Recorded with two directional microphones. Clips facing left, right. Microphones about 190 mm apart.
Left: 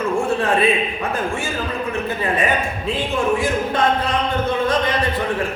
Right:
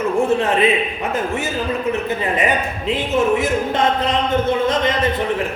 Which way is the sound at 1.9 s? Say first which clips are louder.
Right 2 dB; 20° right (ahead or behind).